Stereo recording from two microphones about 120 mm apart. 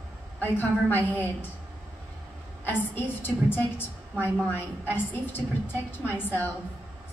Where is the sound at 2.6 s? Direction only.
15° left (ahead or behind).